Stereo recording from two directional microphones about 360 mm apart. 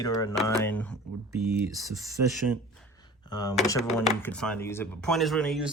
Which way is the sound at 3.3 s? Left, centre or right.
Centre.